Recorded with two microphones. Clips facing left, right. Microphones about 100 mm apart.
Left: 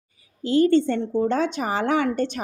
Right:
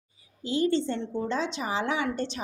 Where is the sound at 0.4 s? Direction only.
55° left (ahead or behind).